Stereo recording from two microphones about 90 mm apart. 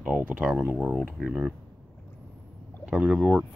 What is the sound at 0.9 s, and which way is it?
Speech, 5° right (ahead or behind).